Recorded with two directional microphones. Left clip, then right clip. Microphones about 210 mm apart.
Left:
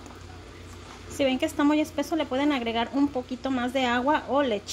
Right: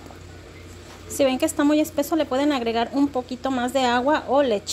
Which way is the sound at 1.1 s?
15° right (ahead or behind).